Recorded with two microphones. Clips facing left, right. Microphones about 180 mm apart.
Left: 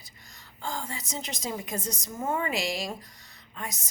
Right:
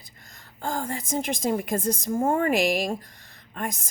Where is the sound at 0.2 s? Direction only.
55° right (ahead or behind).